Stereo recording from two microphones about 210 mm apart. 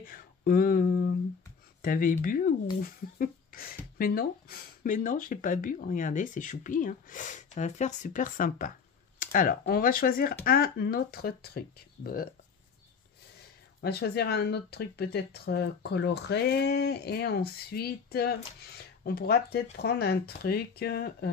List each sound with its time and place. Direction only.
0.0 s a sound: 45° left (ahead or behind)
1.8 s speech: 40° left (ahead or behind)
13.7 s speech: 50° left (ahead or behind)